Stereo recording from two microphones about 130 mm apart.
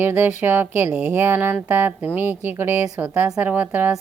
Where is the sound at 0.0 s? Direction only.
15° right (ahead or behind).